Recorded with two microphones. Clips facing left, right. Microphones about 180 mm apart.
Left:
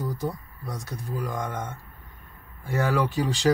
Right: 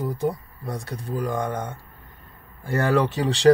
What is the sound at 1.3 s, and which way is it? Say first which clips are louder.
Speech: right 6 dB; 70° right (ahead or behind).